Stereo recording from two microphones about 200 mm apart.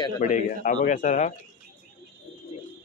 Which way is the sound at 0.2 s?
35° left (ahead or behind).